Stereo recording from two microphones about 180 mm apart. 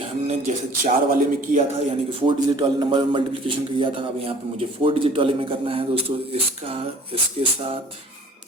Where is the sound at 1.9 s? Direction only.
30° right (ahead or behind).